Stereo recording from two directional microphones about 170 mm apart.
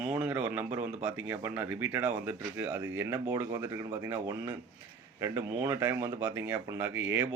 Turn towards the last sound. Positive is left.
turn(degrees=-15)  # may be behind; listen again after turning